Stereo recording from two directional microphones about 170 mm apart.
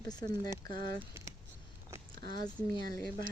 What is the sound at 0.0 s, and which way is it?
Speech, 25° left (ahead or behind).